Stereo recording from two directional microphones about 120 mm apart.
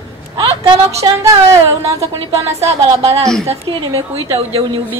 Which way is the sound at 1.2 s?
25° right (ahead or behind).